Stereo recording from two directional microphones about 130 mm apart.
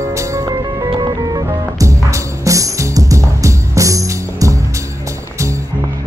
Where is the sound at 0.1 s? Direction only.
25° right (ahead or behind).